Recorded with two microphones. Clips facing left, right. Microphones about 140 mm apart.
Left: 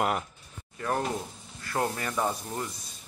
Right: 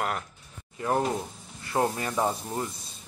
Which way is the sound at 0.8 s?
20° right (ahead or behind).